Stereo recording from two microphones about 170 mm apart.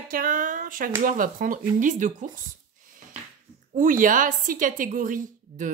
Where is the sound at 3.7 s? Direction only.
50° right (ahead or behind).